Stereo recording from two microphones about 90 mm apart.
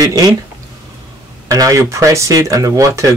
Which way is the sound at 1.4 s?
40° right (ahead or behind).